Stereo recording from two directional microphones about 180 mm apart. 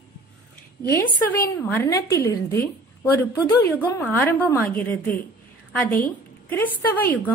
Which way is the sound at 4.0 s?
10° left (ahead or behind).